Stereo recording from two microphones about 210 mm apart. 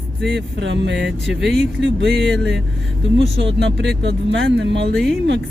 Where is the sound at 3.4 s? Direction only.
55° right (ahead or behind).